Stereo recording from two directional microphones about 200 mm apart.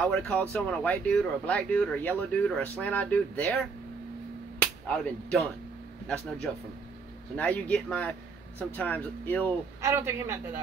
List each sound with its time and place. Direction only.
0.0 s speech: 5° left (ahead or behind)
4.6 s whip: 5° left (ahead or behind)
6.0 s speech: 5° left (ahead or behind)
9.8 s a woman's voice: 15° right (ahead or behind)